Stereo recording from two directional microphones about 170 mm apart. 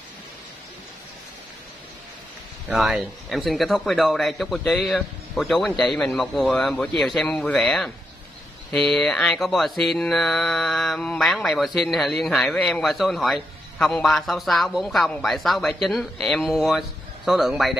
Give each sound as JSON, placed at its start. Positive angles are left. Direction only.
{"t": 2.7, "sound": "mantra", "side_deg": 0}